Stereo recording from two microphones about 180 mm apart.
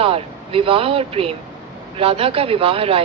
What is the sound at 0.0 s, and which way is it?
A woman's voice, 30° right (ahead or behind).